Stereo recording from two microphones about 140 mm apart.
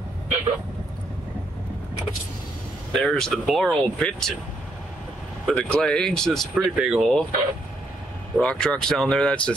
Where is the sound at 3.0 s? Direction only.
5° left (ahead or behind).